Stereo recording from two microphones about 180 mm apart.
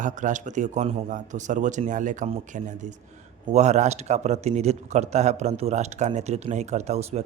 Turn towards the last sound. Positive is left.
turn(degrees=-35)  # may be behind; listen again after turning